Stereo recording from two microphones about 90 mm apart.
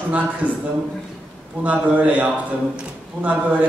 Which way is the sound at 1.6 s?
15° right (ahead or behind).